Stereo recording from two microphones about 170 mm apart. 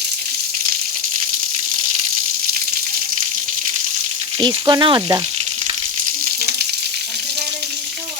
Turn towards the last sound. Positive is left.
turn(degrees=-65)  # may be behind; listen again after turning